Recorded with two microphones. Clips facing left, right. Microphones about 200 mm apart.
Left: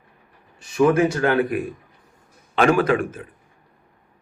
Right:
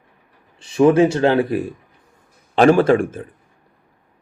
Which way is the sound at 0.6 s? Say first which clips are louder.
Right 4 dB; 30° right (ahead or behind).